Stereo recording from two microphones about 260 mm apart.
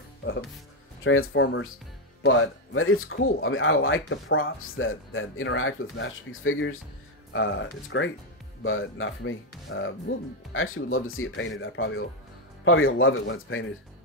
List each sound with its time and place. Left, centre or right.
0.2 s speech: left